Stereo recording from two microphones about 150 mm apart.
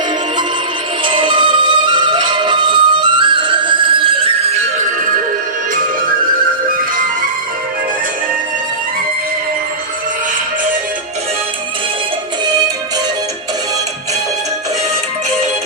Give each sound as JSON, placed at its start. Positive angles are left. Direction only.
{"t": 1.0, "sound": "music", "side_deg": -35}